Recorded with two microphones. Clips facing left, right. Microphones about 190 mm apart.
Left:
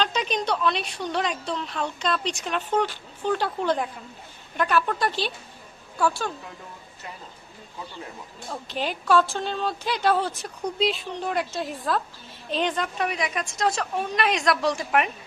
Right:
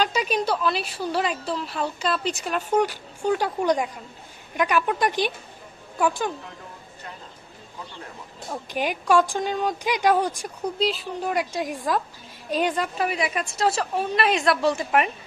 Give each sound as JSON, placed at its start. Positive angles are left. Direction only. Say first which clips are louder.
{"t": 0.0, "sound": "a woman's voice", "louder": "right 2 dB", "side_deg": -10}
{"t": 8.5, "sound": "a woman's voice", "louder": "right 3 dB", "side_deg": -15}
{"t": 10.8, "sound": "a woman's voice", "louder": "even", "side_deg": 0}